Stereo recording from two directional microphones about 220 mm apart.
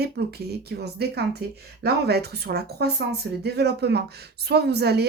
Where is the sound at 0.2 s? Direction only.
45° right (ahead or behind).